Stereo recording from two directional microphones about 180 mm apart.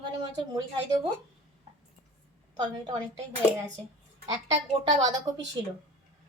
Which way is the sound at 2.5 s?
20° right (ahead or behind).